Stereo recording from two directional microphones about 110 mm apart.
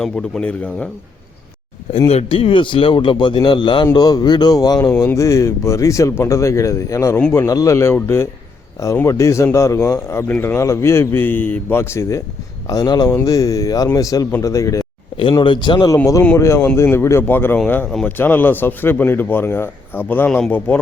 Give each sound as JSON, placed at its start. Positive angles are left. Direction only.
{"t": 0.0, "sound": "a man's voice", "side_deg": 5}
{"t": 2.0, "sound": "speech", "side_deg": 60}
{"t": 3.9, "sound": "a man's voice", "side_deg": 35}
{"t": 4.8, "sound": "speech", "side_deg": 20}
{"t": 7.4, "sound": "speech", "side_deg": 30}
{"t": 12.6, "sound": "a man's voice", "side_deg": 35}
{"t": 15.2, "sound": "speech", "side_deg": 45}
{"t": 16.4, "sound": "speech", "side_deg": 25}
{"t": 17.8, "sound": "a man's voice", "side_deg": 0}
{"t": 18.2, "sound": "a man's voice", "side_deg": 20}